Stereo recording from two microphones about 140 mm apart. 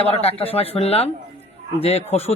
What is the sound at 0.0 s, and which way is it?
Speech, 45° left (ahead or behind).